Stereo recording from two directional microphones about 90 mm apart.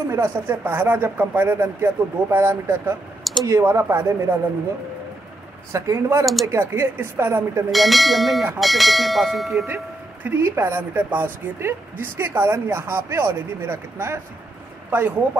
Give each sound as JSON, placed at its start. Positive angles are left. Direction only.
{"t": 0.1, "sound": "speech", "side_deg": -30}
{"t": 5.7, "sound": "speech", "side_deg": -35}
{"t": 7.7, "sound": "speech", "side_deg": 0}
{"t": 10.2, "sound": "speech", "side_deg": -25}